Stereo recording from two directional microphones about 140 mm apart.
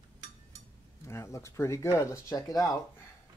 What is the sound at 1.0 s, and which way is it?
Speech, 20° left (ahead or behind).